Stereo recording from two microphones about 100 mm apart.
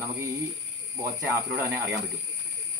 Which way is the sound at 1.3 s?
30° right (ahead or behind).